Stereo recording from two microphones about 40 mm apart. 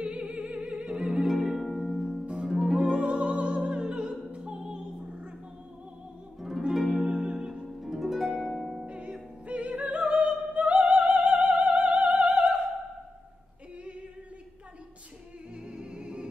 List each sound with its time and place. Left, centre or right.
0.0 s music: right
0.9 s music: centre
1.5 s harp: centre
2.3 s music: centre
3.0 s opera: right
6.7 s harp: centre
7.0 s harp: right
7.3 s music: centre
7.6 s harp: centre
8.8 s opera: right
15.6 s music: right